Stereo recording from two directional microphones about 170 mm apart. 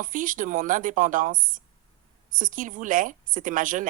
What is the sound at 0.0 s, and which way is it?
Speech, 50° right (ahead or behind).